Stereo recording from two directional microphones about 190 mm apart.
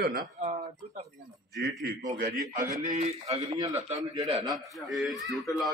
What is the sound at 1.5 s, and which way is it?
Speech, 65° right (ahead or behind).